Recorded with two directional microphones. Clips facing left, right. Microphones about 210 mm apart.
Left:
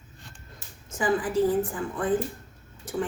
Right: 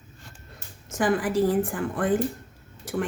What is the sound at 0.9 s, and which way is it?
A woman's voice, 90° right.